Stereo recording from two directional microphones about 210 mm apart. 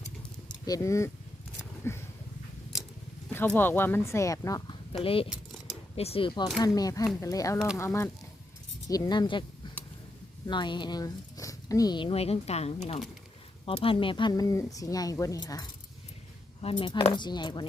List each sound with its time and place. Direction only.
0.4 s speech: 15° left (ahead or behind)
1.8 s a sound: 10° left (ahead or behind)
3.2 s speech: 10° left (ahead or behind); by 5.3 s 25° left (ahead or behind)
5.3 s mechanisms: centre (ahead or behind)
6.0 s speech: 25° left (ahead or behind)
9.6 s a sound: 20° left (ahead or behind)
10.4 s speech: 20° left (ahead or behind)
16.6 s speech: 25° left (ahead or behind)